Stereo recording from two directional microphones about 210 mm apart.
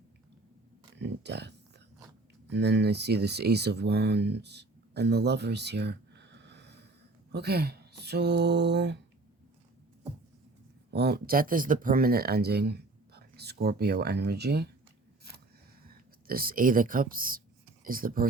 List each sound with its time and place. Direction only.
0.9 s speech: 55° right (ahead or behind)
10.9 s speech: 50° right (ahead or behind)
16.2 s speech: 45° right (ahead or behind)